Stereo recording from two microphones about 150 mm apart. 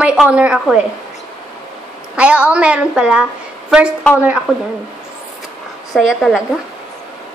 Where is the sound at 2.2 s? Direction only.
5° right (ahead or behind).